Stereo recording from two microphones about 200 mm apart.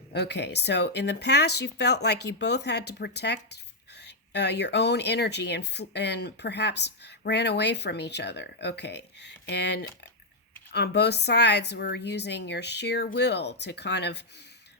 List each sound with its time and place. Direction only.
0.1 s speech: 55° left (ahead or behind)